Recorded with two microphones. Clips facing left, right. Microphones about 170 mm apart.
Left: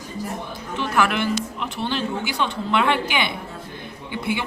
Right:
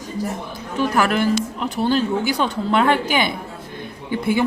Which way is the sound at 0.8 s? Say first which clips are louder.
Right 3 dB; 40° right (ahead or behind).